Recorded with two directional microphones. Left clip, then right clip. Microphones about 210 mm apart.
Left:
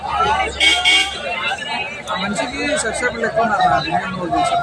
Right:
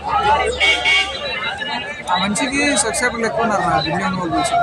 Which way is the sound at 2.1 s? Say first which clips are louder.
Right 4 dB; 55° right (ahead or behind).